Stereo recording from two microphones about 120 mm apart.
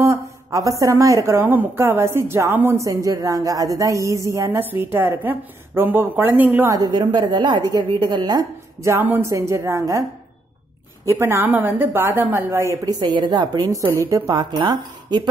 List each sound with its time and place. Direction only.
0.0 s a woman's voice: 25° right (ahead or behind)
6.7 s a woman's voice: 35° right (ahead or behind)
8.8 s a woman's voice: 20° right (ahead or behind)
11.1 s a woman's voice: 20° right (ahead or behind)
12.9 s a woman's voice: 40° right (ahead or behind)